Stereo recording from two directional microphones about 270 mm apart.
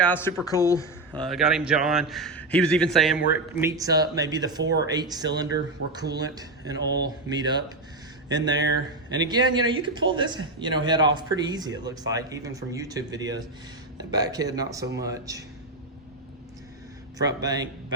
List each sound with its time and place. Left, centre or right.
0.0 s speech: centre
1.2 s a man's voice: centre
3.6 s a man's voice: centre
8.4 s speech: right
9.2 s a man's voice: centre
17.2 s a man's voice: centre